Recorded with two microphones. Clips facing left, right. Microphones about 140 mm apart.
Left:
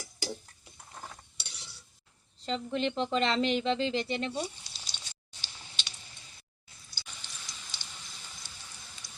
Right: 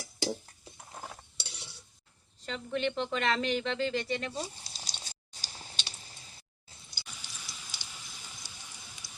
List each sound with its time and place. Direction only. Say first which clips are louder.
1.4 s stir: right 3 dB; 30° right (ahead or behind)
2.4 s speech: left 2 dB; 30° left (ahead or behind)
4.5 s a sound: right 3 dB; 40° right (ahead or behind)
6.9 s rain: even; 10° right (ahead or behind)